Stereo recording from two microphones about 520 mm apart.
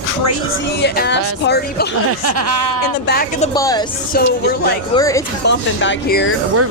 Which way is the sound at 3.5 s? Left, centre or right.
Centre.